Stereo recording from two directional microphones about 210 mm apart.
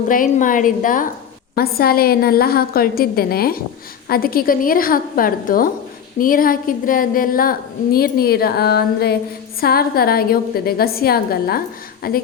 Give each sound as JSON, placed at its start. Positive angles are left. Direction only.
{"t": 0.1, "sound": "a woman's voice", "side_deg": 40}